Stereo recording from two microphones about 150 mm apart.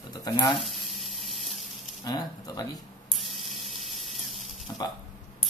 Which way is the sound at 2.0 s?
25° left (ahead or behind).